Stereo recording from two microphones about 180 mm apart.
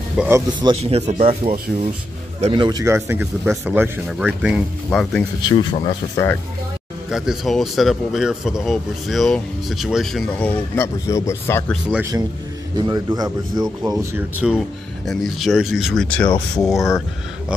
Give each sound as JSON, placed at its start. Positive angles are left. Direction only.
{"t": 0.2, "sound": "speech", "side_deg": -5}
{"t": 0.6, "sound": "speech", "side_deg": -30}
{"t": 2.5, "sound": "speech", "side_deg": -25}
{"t": 4.8, "sound": "speech", "side_deg": 5}
{"t": 5.4, "sound": "speech", "side_deg": 25}
{"t": 7.1, "sound": "speech", "side_deg": -5}
{"t": 12.0, "sound": "a man's voice", "side_deg": -20}
{"t": 14.1, "sound": "speech", "side_deg": -10}